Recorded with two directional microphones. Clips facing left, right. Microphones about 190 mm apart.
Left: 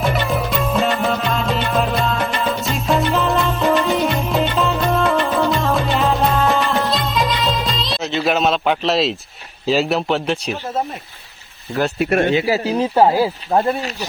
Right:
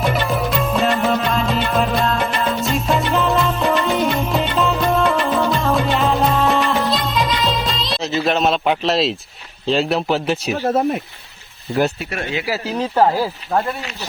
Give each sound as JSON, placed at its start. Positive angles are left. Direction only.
{"t": 0.1, "sound": "music", "side_deg": 0}
{"t": 9.6, "sound": "speech", "side_deg": 0}
{"t": 11.9, "sound": "speech", "side_deg": 60}
{"t": 12.5, "sound": "speech", "side_deg": 20}